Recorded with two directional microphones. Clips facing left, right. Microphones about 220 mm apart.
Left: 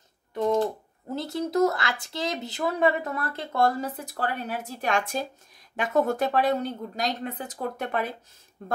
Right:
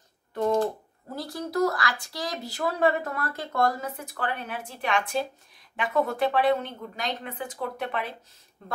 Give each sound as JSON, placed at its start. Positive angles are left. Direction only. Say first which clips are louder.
{"t": 0.3, "sound": "typing", "louder": "even", "side_deg": 15}
{"t": 1.1, "sound": "a woman's voice", "louder": "left 3 dB", "side_deg": 25}